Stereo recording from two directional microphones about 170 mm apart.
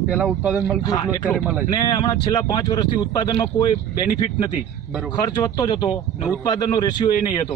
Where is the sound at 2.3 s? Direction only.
25° left (ahead or behind).